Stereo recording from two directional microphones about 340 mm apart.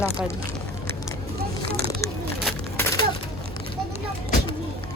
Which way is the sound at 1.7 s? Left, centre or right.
Right.